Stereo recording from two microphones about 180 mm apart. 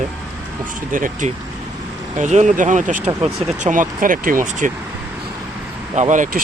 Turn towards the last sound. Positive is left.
turn(degrees=-45)  # may be behind; listen again after turning